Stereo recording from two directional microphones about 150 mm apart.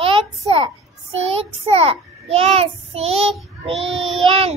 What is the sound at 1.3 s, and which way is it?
A child's voice, 40° right (ahead or behind).